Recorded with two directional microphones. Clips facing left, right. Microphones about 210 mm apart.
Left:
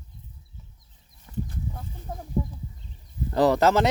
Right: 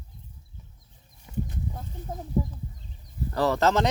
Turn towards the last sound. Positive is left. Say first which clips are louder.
# left 3 dB
turn(degrees=10)  # may be behind; listen again after turning